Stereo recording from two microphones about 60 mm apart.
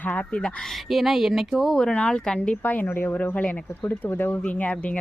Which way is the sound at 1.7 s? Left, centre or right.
Centre.